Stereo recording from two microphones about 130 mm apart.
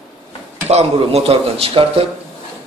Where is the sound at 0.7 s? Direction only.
55° right (ahead or behind).